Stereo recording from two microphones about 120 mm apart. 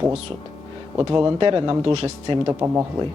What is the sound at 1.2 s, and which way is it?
Speech, 50° right (ahead or behind).